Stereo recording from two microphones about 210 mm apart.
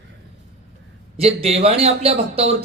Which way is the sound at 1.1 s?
30° right (ahead or behind).